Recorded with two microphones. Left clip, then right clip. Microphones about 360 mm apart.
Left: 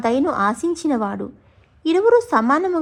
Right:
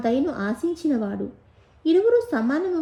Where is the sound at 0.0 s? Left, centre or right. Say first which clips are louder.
Left 6 dB; centre.